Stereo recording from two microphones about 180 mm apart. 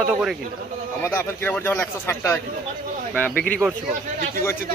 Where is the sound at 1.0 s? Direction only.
15° left (ahead or behind).